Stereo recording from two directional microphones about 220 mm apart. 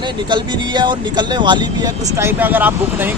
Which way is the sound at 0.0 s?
20° right (ahead or behind).